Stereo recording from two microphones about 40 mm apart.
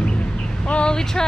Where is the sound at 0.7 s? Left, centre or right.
Left.